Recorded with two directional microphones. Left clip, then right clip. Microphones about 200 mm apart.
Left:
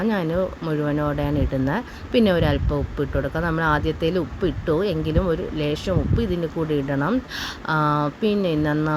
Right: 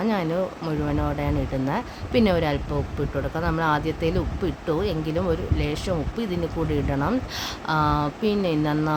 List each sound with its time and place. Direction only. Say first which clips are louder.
0.1 s speech: left 2 dB; 15° left (ahead or behind)